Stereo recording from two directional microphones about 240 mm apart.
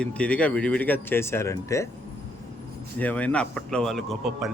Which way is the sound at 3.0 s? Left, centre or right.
Centre.